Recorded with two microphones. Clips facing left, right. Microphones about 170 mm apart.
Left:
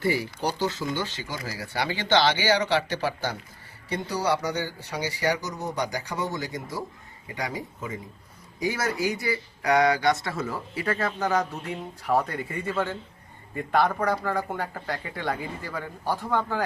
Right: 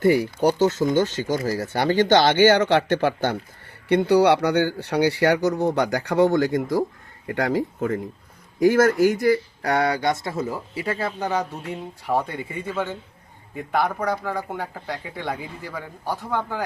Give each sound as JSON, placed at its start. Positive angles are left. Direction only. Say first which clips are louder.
{"t": 0.0, "sound": "speech", "louder": "right 8 dB", "side_deg": -50}
{"t": 10.8, "sound": "speech", "louder": "even", "side_deg": -10}